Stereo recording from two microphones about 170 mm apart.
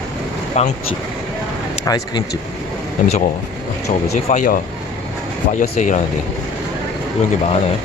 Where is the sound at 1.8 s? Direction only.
25° left (ahead or behind).